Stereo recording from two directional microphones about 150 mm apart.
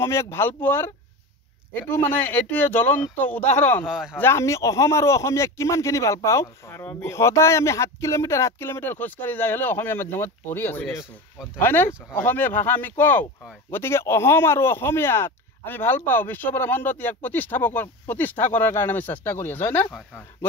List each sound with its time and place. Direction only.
0.0 s speech: 20° left (ahead or behind)
3.8 s speech: 5° right (ahead or behind)
4.2 s speech: 20° left (ahead or behind)